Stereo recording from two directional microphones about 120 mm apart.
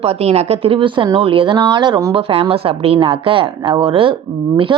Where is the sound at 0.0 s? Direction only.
60° right (ahead or behind); by 2.0 s 40° right (ahead or behind).